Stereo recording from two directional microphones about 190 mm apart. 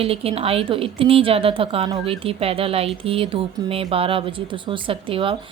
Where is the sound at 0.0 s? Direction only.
30° right (ahead or behind).